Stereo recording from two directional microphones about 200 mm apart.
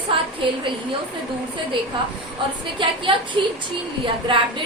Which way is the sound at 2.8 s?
25° right (ahead or behind).